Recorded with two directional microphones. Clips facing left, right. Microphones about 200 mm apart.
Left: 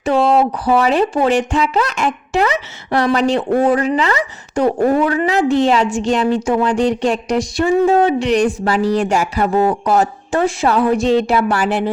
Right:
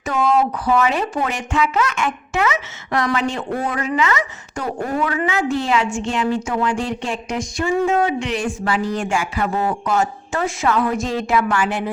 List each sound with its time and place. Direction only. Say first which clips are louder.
0.0 s a woman's voice: left 5 dB; 30° left (ahead or behind)